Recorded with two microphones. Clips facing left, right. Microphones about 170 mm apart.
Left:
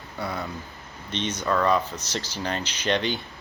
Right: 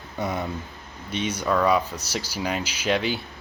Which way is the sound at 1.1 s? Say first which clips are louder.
Right 2 dB; 10° right (ahead or behind).